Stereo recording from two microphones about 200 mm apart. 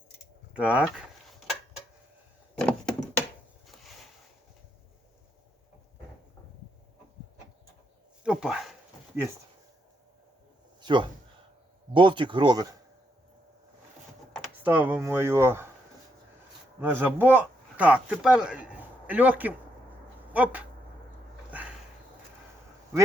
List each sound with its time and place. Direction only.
0.5 s speech: 5° right (ahead or behind)
2.6 s door: 5° left (ahead or behind)
3.7 s a sound: centre (ahead or behind)
8.2 s speech: 5° right (ahead or behind)
10.8 s a sound: 20° right (ahead or behind)
11.9 s speech: 25° right (ahead or behind)
14.6 s speech: 10° right (ahead or behind)
16.8 s speech: 10° right (ahead or behind)